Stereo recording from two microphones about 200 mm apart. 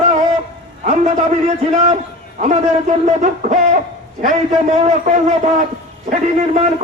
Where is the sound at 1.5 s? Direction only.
35° right (ahead or behind).